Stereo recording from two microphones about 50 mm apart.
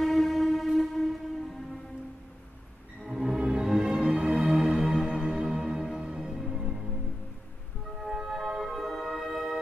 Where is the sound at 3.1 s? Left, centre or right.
Centre.